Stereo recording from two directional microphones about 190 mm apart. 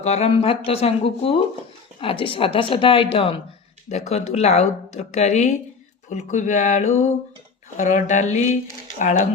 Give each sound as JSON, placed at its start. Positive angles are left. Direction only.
{"t": 0.0, "sound": "a woman's voice", "side_deg": 35}